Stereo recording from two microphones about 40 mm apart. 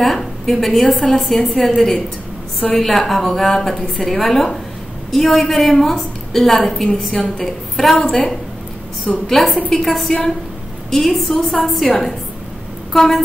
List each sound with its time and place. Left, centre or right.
0.0 s a woman's voice: centre
9.3 s a woman's voice: centre
12.9 s a woman's voice: centre